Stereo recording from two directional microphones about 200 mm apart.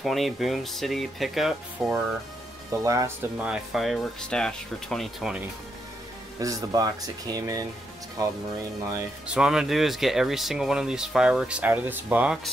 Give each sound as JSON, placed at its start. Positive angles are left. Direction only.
{"t": 0.0, "sound": "speech", "side_deg": 0}
{"t": 2.7, "sound": "speech", "side_deg": -15}
{"t": 3.4, "sound": "speech", "side_deg": 0}
{"t": 6.4, "sound": "speech", "side_deg": -15}
{"t": 9.3, "sound": "speech", "side_deg": -5}